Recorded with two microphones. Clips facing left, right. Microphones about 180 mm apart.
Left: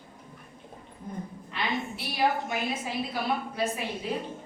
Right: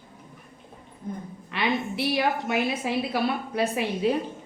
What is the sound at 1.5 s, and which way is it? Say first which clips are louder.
A woman's voice: right 5 dB; 70° right (ahead or behind).